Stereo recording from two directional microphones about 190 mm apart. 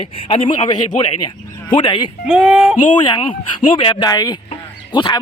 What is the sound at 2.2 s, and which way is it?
Speech, 5° right (ahead or behind).